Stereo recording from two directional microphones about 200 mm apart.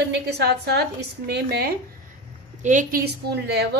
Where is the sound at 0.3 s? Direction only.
55° right (ahead or behind).